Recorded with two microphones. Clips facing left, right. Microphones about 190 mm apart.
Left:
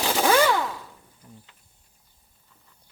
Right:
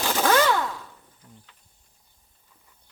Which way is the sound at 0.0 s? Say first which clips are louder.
Left 1 dB; 10° left (ahead or behind).